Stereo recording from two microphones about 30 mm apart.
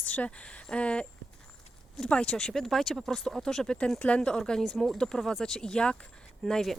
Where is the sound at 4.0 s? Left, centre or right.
Left.